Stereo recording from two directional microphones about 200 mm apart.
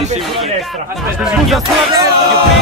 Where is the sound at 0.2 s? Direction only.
Centre (ahead or behind).